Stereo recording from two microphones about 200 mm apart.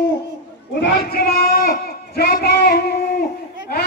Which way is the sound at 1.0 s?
50° left (ahead or behind).